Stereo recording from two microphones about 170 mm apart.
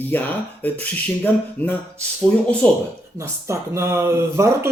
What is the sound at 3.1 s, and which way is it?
Speech, 15° right (ahead or behind).